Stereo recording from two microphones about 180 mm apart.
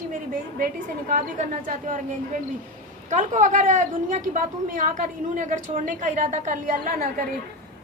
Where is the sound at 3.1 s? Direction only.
45° right (ahead or behind).